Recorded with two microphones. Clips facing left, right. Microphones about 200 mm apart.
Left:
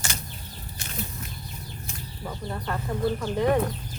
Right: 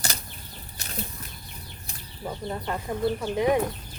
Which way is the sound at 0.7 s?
40° right (ahead or behind).